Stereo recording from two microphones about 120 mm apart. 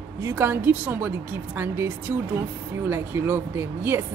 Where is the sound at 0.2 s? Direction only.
20° right (ahead or behind).